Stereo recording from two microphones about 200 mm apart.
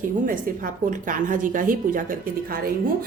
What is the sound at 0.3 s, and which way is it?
A woman's voice, 45° right (ahead or behind).